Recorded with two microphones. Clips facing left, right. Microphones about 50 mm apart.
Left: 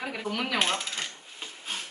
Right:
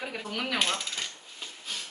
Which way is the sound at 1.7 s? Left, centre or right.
Left.